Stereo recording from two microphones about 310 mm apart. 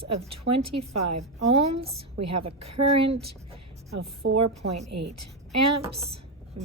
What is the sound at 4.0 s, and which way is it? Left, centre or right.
A woman's voice, right.